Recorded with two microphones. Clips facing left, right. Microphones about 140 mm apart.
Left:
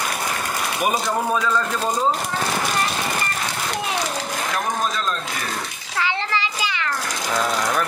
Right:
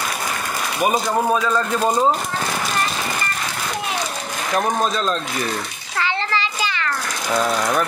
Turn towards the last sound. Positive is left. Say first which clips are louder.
# right 1 dB
turn(degrees=10)  # may be behind; listen again after turning